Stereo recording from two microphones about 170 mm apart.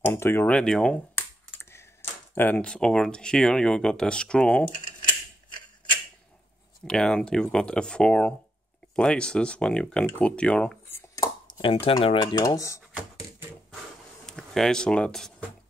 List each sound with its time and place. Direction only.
0.0 s speech: 15° left (ahead or behind)
6.8 s speech: 5° left (ahead or behind)
11.6 s speech: 30° left (ahead or behind)
14.2 s speech: centre (ahead or behind)